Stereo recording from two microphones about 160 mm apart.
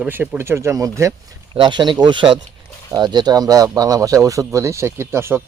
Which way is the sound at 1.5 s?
30° right (ahead or behind).